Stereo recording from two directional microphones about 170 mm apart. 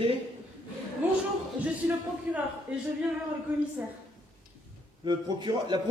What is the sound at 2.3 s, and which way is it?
Speech, 10° right (ahead or behind).